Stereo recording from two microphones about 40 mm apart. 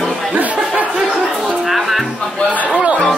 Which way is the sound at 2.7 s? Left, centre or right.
Right.